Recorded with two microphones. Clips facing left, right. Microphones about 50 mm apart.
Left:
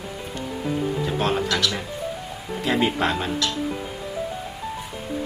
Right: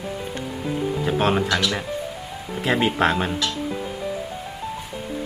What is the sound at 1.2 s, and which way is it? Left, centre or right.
Speech, centre.